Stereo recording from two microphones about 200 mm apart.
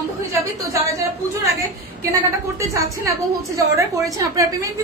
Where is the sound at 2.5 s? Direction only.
15° right (ahead or behind).